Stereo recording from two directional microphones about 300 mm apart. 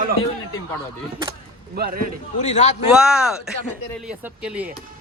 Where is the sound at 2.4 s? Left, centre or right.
Left.